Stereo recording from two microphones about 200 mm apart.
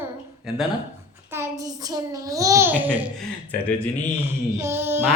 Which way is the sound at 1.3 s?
15° right (ahead or behind).